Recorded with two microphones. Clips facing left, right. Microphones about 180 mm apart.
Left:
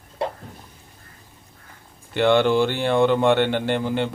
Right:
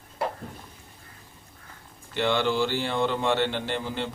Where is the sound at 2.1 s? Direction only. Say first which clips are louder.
Left 7 dB; 55° left (ahead or behind).